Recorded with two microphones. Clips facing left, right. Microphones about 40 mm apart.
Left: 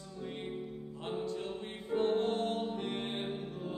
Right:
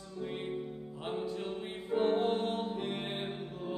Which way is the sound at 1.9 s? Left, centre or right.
Centre.